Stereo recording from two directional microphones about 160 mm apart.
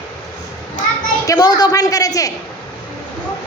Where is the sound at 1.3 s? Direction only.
25° left (ahead or behind).